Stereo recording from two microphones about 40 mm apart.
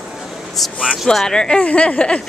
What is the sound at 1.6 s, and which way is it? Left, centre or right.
Speech, left.